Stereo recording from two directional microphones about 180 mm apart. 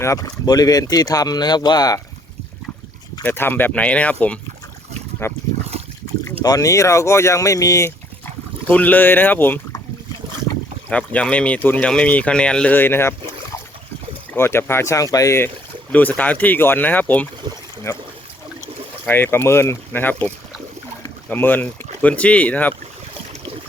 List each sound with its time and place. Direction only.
0.0 s speech: 20° left (ahead or behind)
3.2 s speech: 10° left (ahead or behind)
10.8 s speech: 5° left (ahead or behind)
14.3 s speech: 15° left (ahead or behind)
17.9 s pour: 15° left (ahead or behind)
19.0 s speech: 10° left (ahead or behind)